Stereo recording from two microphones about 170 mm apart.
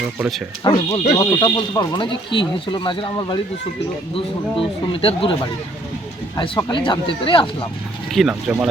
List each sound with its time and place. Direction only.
0.6 s speech: 25° left (ahead or behind)
8.1 s speech: centre (ahead or behind)